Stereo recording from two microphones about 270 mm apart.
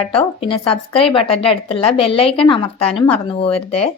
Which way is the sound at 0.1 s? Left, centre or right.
Centre.